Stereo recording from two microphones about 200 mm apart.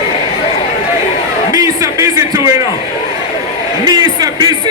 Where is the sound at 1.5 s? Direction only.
15° right (ahead or behind).